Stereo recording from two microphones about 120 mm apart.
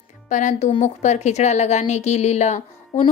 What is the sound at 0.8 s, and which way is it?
A woman's voice, 75° left (ahead or behind).